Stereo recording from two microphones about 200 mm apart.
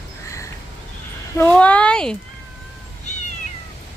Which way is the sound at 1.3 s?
5° left (ahead or behind).